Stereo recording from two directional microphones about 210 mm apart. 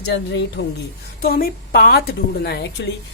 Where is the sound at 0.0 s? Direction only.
55° left (ahead or behind).